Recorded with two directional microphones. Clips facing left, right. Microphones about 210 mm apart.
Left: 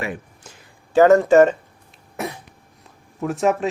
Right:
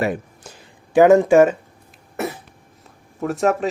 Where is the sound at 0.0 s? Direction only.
40° right (ahead or behind).